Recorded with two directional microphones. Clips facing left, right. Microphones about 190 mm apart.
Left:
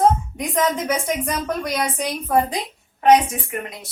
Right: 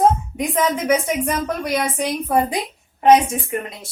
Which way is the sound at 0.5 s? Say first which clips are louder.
Right 2 dB; 5° right (ahead or behind).